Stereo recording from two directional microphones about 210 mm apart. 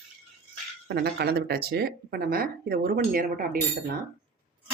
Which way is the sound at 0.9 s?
50° right (ahead or behind).